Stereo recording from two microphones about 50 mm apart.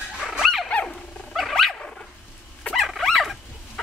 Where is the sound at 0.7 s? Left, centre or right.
Centre.